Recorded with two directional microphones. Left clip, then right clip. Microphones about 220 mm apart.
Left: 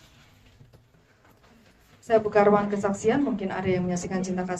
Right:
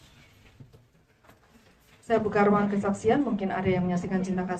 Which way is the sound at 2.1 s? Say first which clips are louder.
Left 4 dB; 50° left (ahead or behind).